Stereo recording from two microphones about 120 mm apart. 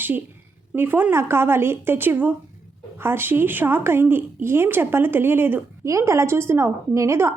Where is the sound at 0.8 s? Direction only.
15° right (ahead or behind).